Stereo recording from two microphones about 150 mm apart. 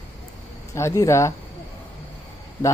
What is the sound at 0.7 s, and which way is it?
Speech, 20° left (ahead or behind).